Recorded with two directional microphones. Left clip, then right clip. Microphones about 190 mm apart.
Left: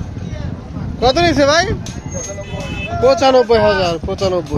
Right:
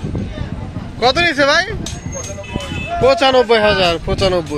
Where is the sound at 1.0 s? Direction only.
Centre (ahead or behind).